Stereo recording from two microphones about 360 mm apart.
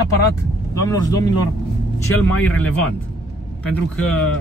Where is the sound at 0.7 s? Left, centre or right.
Centre.